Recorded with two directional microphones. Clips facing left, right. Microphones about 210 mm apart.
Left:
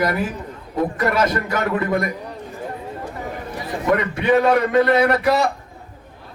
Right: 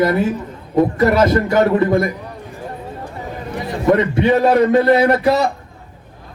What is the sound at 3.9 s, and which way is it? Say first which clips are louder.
A man's voice: right 4 dB; 30° right (ahead or behind).